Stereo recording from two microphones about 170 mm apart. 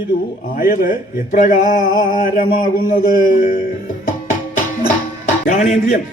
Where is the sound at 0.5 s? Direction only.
55° left (ahead or behind).